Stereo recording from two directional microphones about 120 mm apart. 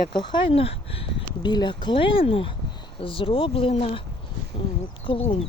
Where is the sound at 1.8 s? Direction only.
50° left (ahead or behind).